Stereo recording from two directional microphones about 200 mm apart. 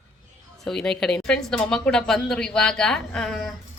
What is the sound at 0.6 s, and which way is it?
A woman's voice, 5° left (ahead or behind).